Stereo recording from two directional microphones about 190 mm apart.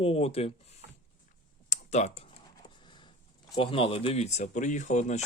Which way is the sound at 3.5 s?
25° left (ahead or behind).